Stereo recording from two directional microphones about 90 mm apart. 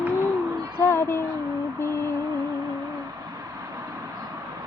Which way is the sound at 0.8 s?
25° left (ahead or behind).